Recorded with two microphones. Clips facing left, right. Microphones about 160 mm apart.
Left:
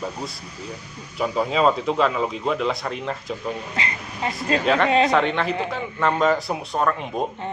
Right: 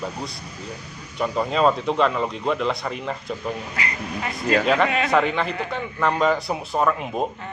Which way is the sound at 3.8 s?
25° left (ahead or behind).